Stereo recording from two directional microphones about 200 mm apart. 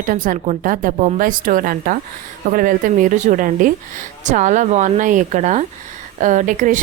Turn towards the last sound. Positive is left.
turn(degrees=-40)  # may be behind; listen again after turning